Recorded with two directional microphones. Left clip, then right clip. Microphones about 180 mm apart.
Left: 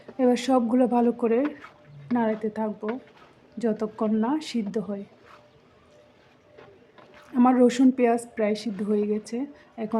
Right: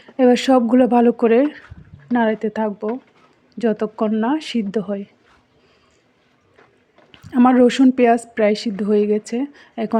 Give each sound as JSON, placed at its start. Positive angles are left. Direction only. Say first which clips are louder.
{"t": 0.2, "sound": "a woman's voice", "louder": "right 8 dB", "side_deg": -35}
{"t": 7.3, "sound": "a woman's voice", "louder": "right 6 dB", "side_deg": -35}